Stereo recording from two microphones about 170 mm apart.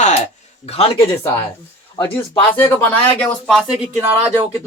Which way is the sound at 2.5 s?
10° left (ahead or behind).